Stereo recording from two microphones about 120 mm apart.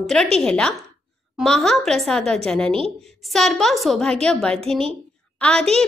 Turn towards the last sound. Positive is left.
turn(degrees=5)  # may be behind; listen again after turning